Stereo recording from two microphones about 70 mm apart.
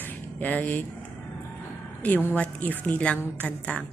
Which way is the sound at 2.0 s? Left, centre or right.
Left.